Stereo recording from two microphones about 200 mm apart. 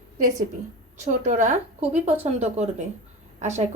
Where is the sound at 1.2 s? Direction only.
35° right (ahead or behind).